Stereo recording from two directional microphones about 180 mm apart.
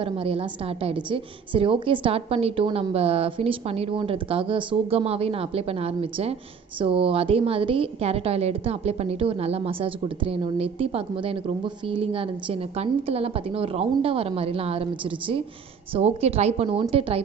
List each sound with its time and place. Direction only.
0.0 s a woman's voice: 30° right (ahead or behind)